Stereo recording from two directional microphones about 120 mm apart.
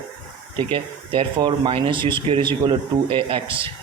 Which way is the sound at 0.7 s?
45° right (ahead or behind).